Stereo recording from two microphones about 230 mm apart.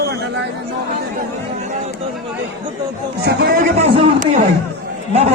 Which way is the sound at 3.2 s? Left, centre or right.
Right.